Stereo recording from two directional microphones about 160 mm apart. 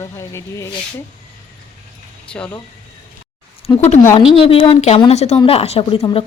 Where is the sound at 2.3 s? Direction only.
5° left (ahead or behind).